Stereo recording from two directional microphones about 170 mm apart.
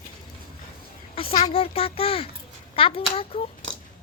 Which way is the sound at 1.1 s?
30° left (ahead or behind).